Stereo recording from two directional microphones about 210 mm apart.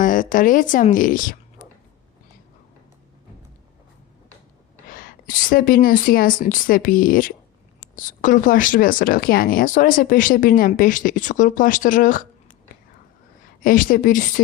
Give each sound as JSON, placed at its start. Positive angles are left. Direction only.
{"t": 0.0, "sound": "speech", "side_deg": 40}
{"t": 4.9, "sound": "a woman's voice", "side_deg": 40}
{"t": 13.6, "sound": "speech", "side_deg": 40}